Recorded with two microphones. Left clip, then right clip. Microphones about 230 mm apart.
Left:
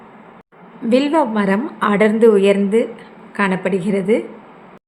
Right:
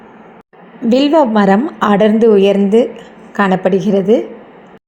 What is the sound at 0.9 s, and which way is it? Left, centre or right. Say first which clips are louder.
A woman's voice: right 5 dB; centre.